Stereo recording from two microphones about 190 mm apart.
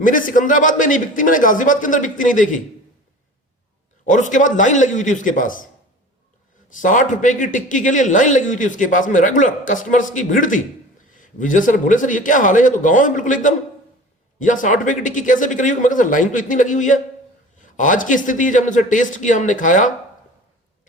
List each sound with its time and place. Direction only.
0.0 s a man's voice: 45° left (ahead or behind)
4.0 s a man's voice: 40° left (ahead or behind)
6.7 s a man's voice: 40° left (ahead or behind)